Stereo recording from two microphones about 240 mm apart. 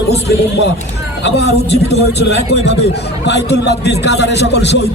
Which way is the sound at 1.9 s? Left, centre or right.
Left.